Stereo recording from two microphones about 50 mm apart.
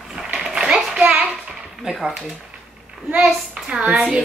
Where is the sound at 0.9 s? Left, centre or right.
Right.